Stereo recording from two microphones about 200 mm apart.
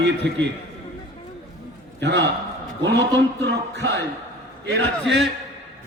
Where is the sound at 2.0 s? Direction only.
60° right (ahead or behind).